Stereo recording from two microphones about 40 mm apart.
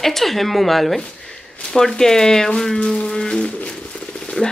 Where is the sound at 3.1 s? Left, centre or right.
Centre.